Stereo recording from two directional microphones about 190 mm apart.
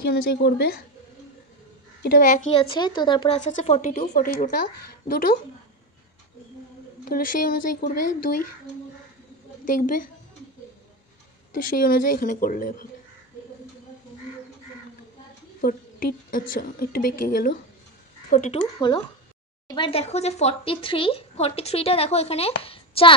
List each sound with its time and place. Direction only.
0.0 s a woman's voice: 55° left (ahead or behind)
2.0 s a woman's voice: 45° left (ahead or behind); by 3.3 s 25° left (ahead or behind)
3.3 s a woman's voice: 40° left (ahead or behind)
7.1 s a woman's voice: 45° left (ahead or behind)
9.7 s a woman's voice: 45° left (ahead or behind)
11.7 s a woman's voice: 50° left (ahead or behind)
15.6 s a woman's voice: 50° left (ahead or behind)
18.8 s a woman's voice: 25° left (ahead or behind)